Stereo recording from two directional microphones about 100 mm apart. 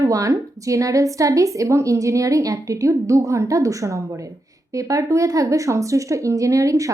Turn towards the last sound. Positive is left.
turn(degrees=-35)  # may be behind; listen again after turning